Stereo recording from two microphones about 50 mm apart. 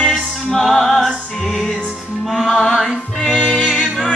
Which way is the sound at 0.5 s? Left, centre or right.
Centre.